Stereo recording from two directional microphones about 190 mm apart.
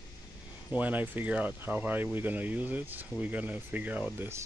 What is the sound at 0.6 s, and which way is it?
Speech, 10° right (ahead or behind).